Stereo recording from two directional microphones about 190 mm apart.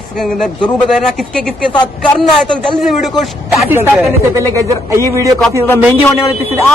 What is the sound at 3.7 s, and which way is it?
Speech, 10° right (ahead or behind).